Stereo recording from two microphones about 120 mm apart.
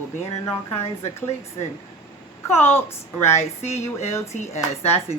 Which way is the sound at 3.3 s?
65° left (ahead or behind).